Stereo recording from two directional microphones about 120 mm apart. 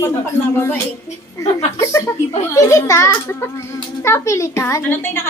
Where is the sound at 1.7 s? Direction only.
25° left (ahead or behind).